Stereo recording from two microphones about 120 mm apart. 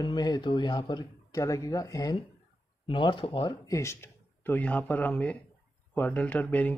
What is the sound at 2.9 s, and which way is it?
Speech, 40° left (ahead or behind).